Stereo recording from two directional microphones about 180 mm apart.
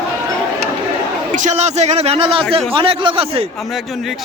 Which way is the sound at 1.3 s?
40° right (ahead or behind).